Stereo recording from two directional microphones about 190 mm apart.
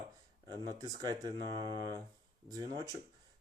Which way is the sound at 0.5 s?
20° right (ahead or behind).